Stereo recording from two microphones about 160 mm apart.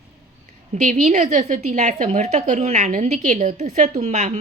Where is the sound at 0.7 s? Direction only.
50° right (ahead or behind).